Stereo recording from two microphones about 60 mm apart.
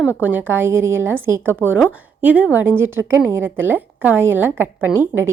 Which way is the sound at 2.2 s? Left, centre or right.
Right.